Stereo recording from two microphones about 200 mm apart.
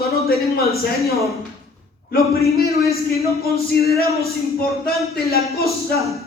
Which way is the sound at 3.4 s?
50° left (ahead or behind).